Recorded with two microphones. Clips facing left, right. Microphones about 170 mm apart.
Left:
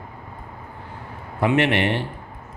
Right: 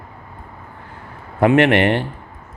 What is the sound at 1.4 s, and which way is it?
Speech, 55° right (ahead or behind).